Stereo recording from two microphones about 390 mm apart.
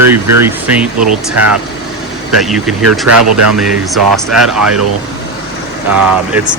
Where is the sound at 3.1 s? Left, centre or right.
Right.